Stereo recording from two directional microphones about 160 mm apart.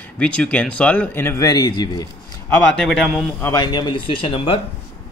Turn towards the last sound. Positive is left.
turn(degrees=35)  # may be behind; listen again after turning